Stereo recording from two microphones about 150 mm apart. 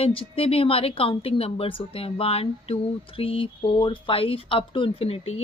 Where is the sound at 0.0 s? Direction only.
40° left (ahead or behind).